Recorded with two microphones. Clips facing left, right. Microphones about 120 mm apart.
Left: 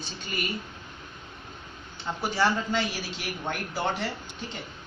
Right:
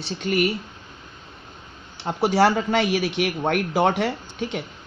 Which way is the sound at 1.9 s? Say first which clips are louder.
Right 9 dB; 75° right (ahead or behind).